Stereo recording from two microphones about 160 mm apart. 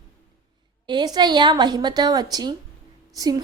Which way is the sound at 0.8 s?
30° right (ahead or behind).